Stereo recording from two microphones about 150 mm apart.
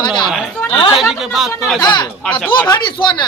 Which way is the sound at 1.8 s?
30° left (ahead or behind).